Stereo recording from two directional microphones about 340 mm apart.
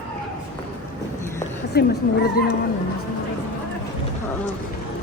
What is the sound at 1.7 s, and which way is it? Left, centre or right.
Speech, left.